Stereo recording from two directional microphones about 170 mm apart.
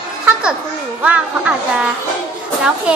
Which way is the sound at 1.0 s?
5° right (ahead or behind).